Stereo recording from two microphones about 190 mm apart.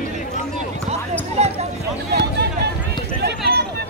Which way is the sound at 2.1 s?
60° right (ahead or behind).